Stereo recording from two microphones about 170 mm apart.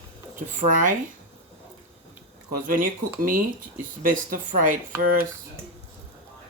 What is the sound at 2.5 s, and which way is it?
Speech, 55° right (ahead or behind).